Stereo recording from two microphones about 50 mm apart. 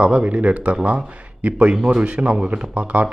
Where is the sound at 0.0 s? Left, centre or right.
Right.